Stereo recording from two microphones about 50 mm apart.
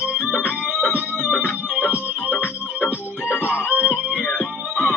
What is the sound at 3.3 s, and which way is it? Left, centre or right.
Music, left.